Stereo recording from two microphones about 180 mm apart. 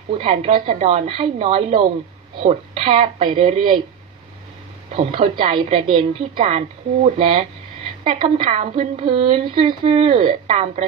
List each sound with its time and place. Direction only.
0.1 s a woman's voice: 30° right (ahead or behind)
4.9 s a woman's voice: 25° right (ahead or behind)